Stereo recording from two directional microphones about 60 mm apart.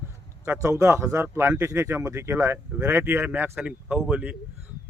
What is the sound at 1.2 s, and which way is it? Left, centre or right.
Speech, right.